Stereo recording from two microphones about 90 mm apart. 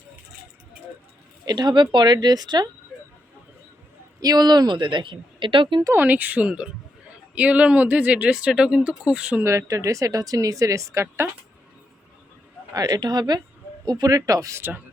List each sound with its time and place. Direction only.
1.5 s speech: 50° right (ahead or behind)
2.1 s a woman's voice: 45° right (ahead or behind)
4.2 s speech: 50° right (ahead or behind); by 5.8 s 65° right (ahead or behind)
5.9 s speech: 20° right (ahead or behind)
9.4 s speech: 35° right (ahead or behind)
12.7 s a woman's voice: 45° right (ahead or behind)